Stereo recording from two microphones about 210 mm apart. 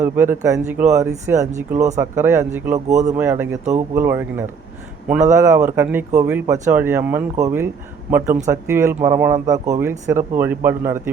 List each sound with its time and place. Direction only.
0.0 s speech: 10° right (ahead or behind)
2.9 s speech: 35° right (ahead or behind)
3.2 s speech: 10° right (ahead or behind)